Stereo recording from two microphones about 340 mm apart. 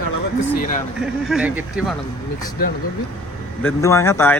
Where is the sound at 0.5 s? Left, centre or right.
Left.